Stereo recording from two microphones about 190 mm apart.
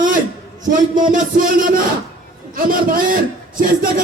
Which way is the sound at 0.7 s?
45° right (ahead or behind).